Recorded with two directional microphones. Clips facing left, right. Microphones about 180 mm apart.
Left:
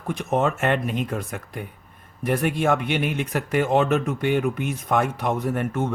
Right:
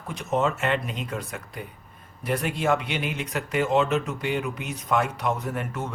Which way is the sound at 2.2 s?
55° left (ahead or behind).